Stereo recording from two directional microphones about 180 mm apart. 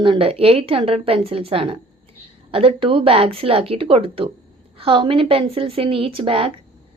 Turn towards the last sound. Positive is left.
turn(degrees=-30)  # may be behind; listen again after turning